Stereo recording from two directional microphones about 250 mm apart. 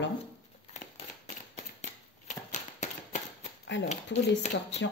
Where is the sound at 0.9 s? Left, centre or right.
Left.